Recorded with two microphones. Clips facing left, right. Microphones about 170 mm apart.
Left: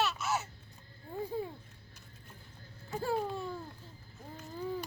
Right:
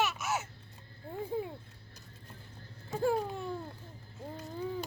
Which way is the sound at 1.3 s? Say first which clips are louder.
Right 2 dB; 15° right (ahead or behind).